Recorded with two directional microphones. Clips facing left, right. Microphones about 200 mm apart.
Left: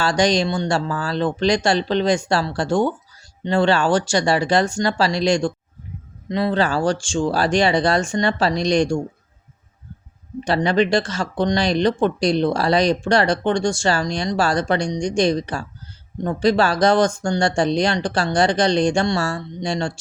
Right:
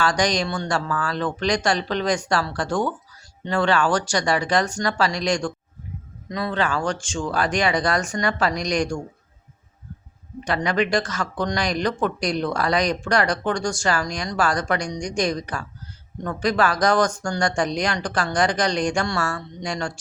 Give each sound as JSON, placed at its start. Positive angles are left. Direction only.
{"t": 0.0, "sound": "speech", "side_deg": 30}
{"t": 10.4, "sound": "speech", "side_deg": 30}